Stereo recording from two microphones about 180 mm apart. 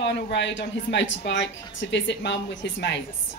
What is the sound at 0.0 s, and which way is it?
A woman's voice, 75° left (ahead or behind).